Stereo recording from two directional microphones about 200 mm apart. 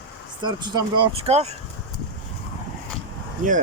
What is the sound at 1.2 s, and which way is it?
Speech, 30° right (ahead or behind).